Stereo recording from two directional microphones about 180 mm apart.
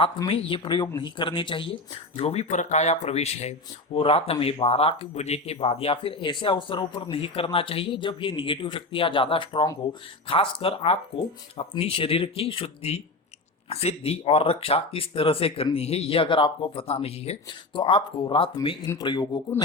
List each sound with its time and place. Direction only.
0.0 s speech: 30° left (ahead or behind)